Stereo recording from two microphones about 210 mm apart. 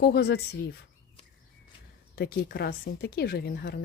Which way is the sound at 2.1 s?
50° left (ahead or behind).